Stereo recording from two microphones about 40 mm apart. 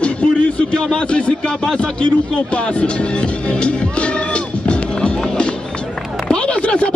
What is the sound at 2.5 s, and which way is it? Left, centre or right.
Music, left.